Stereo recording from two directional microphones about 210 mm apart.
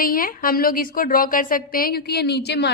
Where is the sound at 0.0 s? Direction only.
45° left (ahead or behind).